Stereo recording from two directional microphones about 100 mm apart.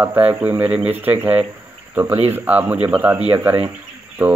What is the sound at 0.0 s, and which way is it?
Speech, 20° right (ahead or behind).